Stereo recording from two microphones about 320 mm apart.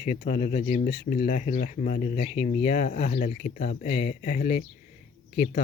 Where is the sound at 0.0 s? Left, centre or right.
Left.